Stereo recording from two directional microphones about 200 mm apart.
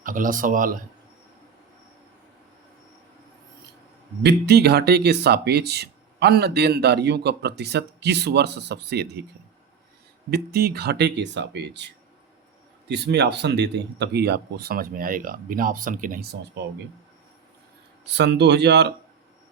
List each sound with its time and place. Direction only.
0.0 s speech: 40° right (ahead or behind)
4.2 s speech: 55° right (ahead or behind)
10.2 s speech: 55° right (ahead or behind)
12.9 s speech: 60° right (ahead or behind)
18.1 s speech: 60° right (ahead or behind)